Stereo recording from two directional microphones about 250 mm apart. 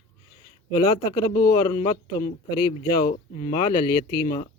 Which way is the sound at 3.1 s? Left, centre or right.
Left.